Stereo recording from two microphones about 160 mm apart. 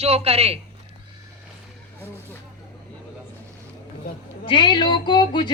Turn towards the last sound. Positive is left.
turn(degrees=30)  # may be behind; listen again after turning